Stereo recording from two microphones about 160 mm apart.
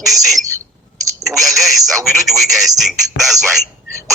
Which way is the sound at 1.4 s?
Centre (ahead or behind).